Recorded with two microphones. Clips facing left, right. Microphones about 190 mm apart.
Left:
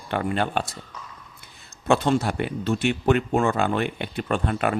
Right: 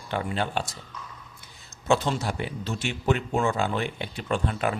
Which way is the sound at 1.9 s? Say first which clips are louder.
Left 4 dB; 55° left (ahead or behind).